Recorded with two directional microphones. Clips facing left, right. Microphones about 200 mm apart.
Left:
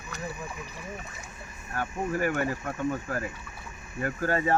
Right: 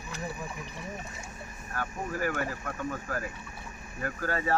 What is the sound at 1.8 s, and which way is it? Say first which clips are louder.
Speech: left 4 dB; 20° left (ahead or behind).